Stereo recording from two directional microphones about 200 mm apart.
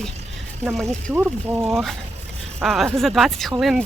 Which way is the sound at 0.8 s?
10° right (ahead or behind).